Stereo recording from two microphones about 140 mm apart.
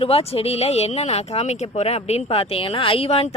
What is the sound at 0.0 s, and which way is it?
Speech, 45° left (ahead or behind).